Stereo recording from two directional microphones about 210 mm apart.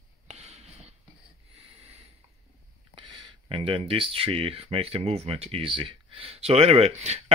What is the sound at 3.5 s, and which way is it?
Speech, 25° right (ahead or behind).